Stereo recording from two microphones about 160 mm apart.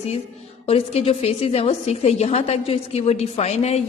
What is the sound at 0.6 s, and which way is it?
A woman's voice, 35° left (ahead or behind).